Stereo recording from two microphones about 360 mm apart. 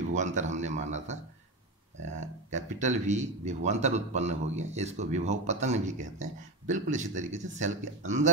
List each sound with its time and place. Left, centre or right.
0.1 s a man's voice: centre
2.1 s a man's voice: centre